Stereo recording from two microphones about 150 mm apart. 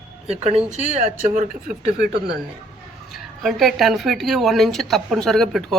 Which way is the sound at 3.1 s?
Centre (ahead or behind).